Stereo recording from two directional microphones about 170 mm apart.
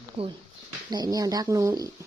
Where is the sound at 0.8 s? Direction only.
25° right (ahead or behind).